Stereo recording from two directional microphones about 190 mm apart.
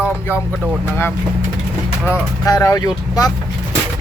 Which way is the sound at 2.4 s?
20° left (ahead or behind).